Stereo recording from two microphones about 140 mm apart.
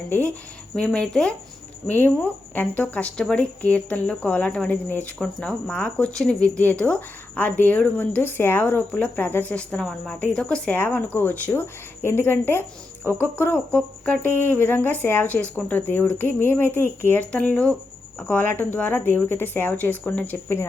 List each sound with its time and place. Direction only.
0.8 s a woman's voice: 5° left (ahead or behind)